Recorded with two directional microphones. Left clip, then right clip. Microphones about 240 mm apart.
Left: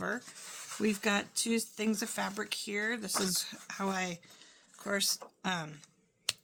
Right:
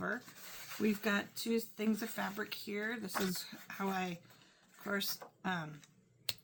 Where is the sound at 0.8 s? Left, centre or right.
Left.